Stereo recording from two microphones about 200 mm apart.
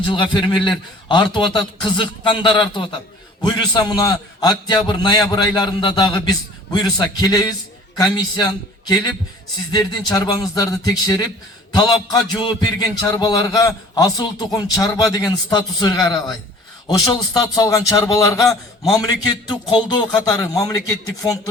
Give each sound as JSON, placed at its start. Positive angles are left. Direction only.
{"t": 0.0, "sound": "a man's voice", "side_deg": 25}
{"t": 9.7, "sound": "a man's voice", "side_deg": 20}
{"t": 17.5, "sound": "a man's voice", "side_deg": 15}